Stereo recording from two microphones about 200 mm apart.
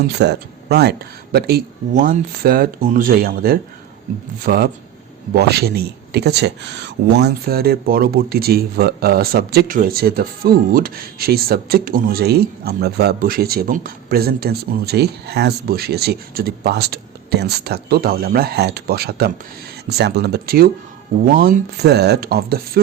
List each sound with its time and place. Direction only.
0.0 s speech: 55° right (ahead or behind)
1.9 s speech: 40° right (ahead or behind)